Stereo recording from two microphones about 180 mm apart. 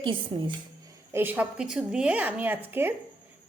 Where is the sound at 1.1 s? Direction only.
10° right (ahead or behind).